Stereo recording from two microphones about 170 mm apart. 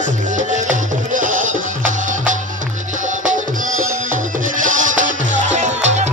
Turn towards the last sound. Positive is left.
turn(degrees=-40)  # may be behind; listen again after turning